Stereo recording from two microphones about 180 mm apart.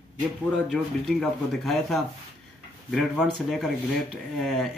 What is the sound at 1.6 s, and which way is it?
Speech, centre (ahead or behind).